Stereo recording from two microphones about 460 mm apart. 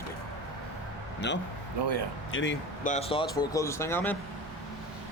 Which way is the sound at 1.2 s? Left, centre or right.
Left.